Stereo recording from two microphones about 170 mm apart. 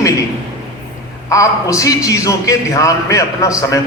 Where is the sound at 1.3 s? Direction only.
20° left (ahead or behind).